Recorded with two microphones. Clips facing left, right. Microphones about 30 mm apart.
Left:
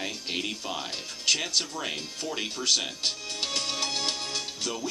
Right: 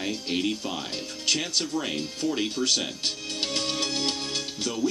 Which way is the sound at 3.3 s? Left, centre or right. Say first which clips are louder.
Right 2 dB; centre.